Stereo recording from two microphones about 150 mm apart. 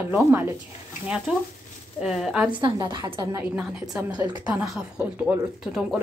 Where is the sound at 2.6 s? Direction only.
35° right (ahead or behind).